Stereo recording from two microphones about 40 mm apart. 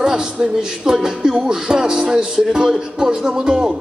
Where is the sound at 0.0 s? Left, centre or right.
Centre.